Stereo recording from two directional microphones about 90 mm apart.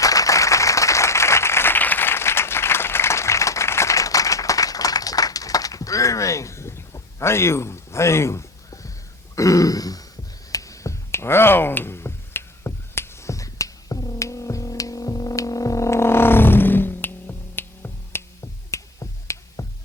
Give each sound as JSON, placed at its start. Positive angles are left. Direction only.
{"t": 0.0, "sound": "applause", "side_deg": 40}
{"t": 9.3, "sound": "throat clearing", "side_deg": 40}
{"t": 10.5, "sound": "a sound", "side_deg": 40}
{"t": 18.7, "sound": "finger snapping", "side_deg": 35}